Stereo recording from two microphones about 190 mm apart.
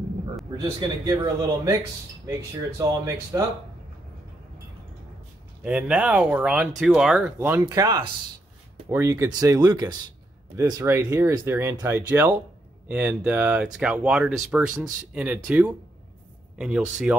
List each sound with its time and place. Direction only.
0.6 s speech: 20° right (ahead or behind)
2.8 s speech: 15° right (ahead or behind)
5.6 s speech: 5° right (ahead or behind)